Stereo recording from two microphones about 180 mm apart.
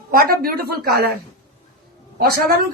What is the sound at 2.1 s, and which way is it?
Speech, 55° right (ahead or behind).